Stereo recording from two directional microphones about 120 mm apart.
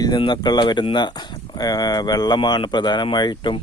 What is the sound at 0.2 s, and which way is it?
Speech, 40° left (ahead or behind).